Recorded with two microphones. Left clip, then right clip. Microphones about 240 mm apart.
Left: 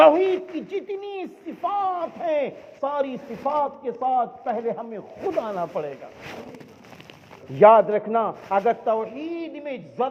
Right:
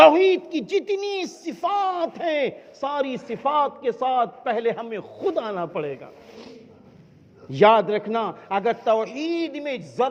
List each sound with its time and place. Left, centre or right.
0.0 s speech: right
7.5 s speech: right